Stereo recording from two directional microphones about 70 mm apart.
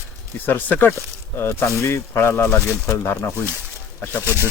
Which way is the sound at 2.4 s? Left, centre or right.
Centre.